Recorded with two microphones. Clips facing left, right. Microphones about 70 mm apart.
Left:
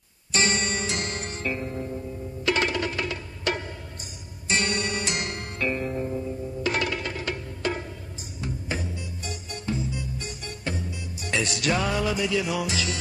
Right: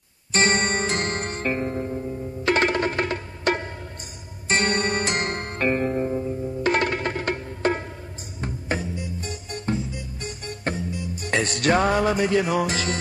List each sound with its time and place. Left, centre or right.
0.3 s music: right
9.2 s music: right